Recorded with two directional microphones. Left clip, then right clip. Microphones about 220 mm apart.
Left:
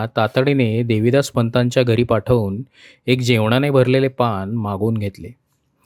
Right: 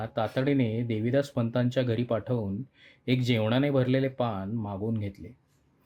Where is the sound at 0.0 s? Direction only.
35° left (ahead or behind).